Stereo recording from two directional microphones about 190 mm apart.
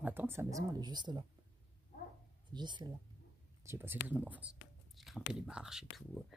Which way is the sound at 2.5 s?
25° right (ahead or behind).